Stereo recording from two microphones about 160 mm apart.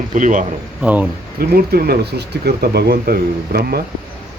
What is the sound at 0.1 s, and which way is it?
Speech, 55° right (ahead or behind).